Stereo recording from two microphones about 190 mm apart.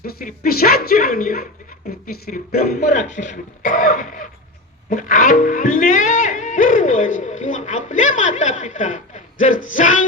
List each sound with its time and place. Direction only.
0.0 s speech: 50° left (ahead or behind)
2.2 s a sound: 55° left (ahead or behind)
2.7 s speech: 40° left (ahead or behind)